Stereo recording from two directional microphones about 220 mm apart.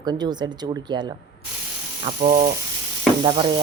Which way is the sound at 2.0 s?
30° right (ahead or behind).